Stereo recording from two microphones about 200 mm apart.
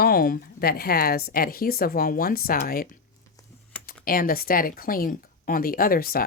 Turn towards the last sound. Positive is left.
turn(degrees=45)  # may be behind; listen again after turning